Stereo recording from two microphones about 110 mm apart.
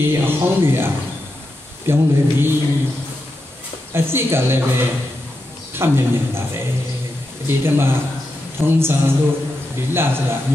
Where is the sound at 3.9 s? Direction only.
20° right (ahead or behind).